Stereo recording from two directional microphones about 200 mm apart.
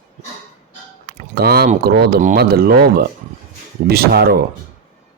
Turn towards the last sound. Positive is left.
turn(degrees=-50)  # may be behind; listen again after turning